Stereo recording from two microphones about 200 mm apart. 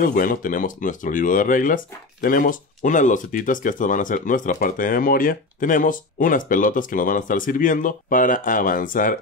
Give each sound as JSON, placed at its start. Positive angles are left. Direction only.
{"t": 0.0, "sound": "speech", "side_deg": 45}